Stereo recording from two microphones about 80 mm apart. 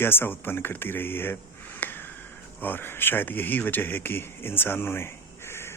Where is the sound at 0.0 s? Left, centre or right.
Left.